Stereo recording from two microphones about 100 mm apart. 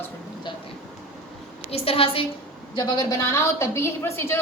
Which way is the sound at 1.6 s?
75° left (ahead or behind).